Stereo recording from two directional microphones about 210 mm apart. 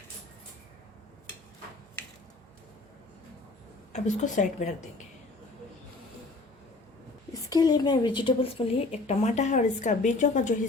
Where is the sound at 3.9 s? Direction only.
35° left (ahead or behind).